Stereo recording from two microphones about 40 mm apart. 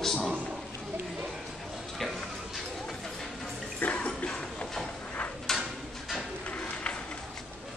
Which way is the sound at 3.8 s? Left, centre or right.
Left.